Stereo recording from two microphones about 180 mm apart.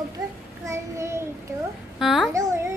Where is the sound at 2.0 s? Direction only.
Centre (ahead or behind).